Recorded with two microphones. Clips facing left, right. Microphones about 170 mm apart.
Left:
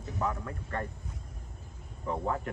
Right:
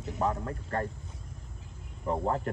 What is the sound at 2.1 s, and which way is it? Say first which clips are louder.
Speech: right 3 dB; 35° right (ahead or behind).